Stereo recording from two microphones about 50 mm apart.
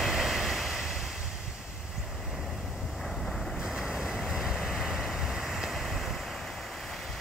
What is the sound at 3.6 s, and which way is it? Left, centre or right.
Vehicle, centre.